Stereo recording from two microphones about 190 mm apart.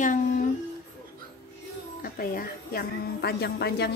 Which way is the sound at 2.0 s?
50° left (ahead or behind).